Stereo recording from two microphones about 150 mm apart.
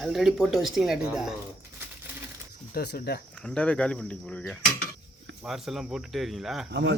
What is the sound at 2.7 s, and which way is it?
Speech, 90° left.